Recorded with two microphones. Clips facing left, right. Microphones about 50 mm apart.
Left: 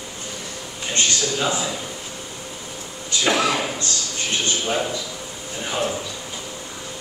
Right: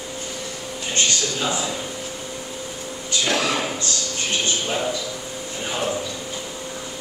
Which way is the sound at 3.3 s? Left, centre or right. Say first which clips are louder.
Left 3 dB; centre.